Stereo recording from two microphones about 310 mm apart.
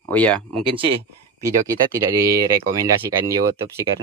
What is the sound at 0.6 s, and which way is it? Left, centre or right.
Speech, centre.